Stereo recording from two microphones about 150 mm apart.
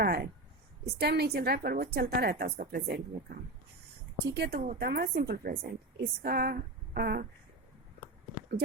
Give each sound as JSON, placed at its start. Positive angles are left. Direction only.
{"t": 0.0, "sound": "a woman's voice", "side_deg": -90}
{"t": 4.4, "sound": "a woman's voice", "side_deg": -90}